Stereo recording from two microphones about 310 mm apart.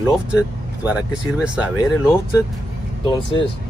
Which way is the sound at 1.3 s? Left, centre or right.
Centre.